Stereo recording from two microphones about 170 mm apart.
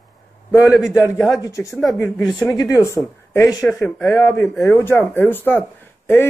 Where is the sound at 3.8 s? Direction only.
5° left (ahead or behind).